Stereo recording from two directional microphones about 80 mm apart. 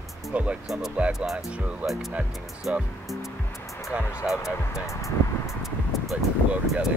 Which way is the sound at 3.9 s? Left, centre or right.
Centre.